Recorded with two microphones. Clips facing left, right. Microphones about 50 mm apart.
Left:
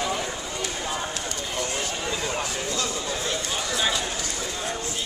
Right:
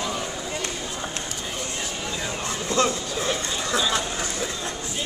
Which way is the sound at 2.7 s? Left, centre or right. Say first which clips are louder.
Right 7 dB; right.